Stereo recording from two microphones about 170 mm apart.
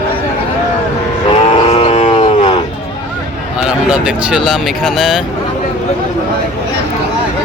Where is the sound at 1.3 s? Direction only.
35° left (ahead or behind).